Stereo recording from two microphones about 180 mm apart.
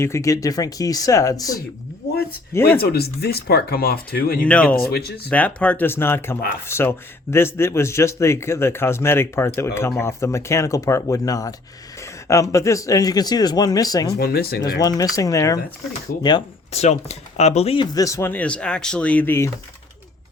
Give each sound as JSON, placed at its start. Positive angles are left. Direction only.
{"t": 0.0, "sound": "speech", "side_deg": 15}
{"t": 2.8, "sound": "speech", "side_deg": 60}
{"t": 4.4, "sound": "speech", "side_deg": 5}
{"t": 4.9, "sound": "speech", "side_deg": 60}
{"t": 5.3, "sound": "speech", "side_deg": 10}
{"t": 14.2, "sound": "speech", "side_deg": 60}
{"t": 14.8, "sound": "speech", "side_deg": 20}
{"t": 16.7, "sound": "speech", "side_deg": 35}
{"t": 17.9, "sound": "speech", "side_deg": 20}